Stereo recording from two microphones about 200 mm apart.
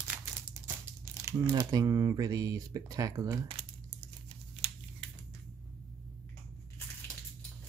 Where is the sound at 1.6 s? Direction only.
15° right (ahead or behind).